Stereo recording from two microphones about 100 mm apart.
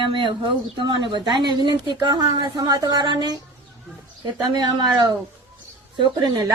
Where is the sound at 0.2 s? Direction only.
55° right (ahead or behind).